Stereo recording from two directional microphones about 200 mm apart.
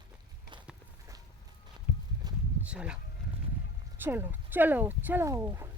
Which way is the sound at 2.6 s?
5° right (ahead or behind).